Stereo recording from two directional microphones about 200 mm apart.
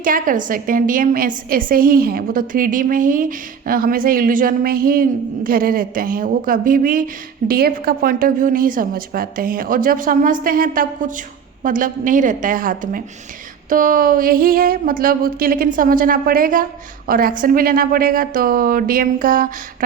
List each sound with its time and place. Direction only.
0.0 s a woman's voice: 40° right (ahead or behind)